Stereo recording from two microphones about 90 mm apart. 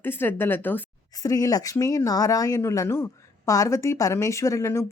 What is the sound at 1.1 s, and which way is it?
Speech, 40° left (ahead or behind).